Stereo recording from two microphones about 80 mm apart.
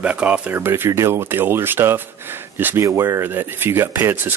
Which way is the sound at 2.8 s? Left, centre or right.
Right.